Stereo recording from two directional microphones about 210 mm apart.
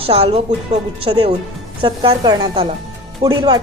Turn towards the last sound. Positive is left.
turn(degrees=-20)  # may be behind; listen again after turning